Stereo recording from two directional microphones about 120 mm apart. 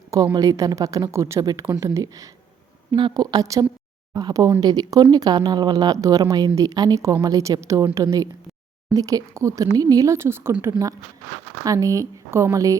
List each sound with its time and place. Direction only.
0.3 s speech: 30° right (ahead or behind)
2.9 s speech: 40° right (ahead or behind)